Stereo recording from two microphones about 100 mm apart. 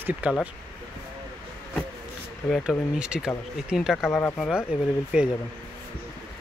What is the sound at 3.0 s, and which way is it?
Speech, 10° right (ahead or behind).